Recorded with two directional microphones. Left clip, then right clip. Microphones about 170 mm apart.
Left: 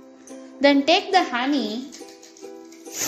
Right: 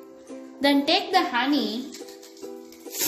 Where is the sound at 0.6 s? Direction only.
45° left (ahead or behind).